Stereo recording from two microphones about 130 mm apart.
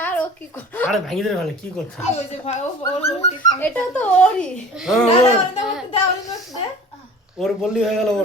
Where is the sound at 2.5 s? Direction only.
55° left (ahead or behind).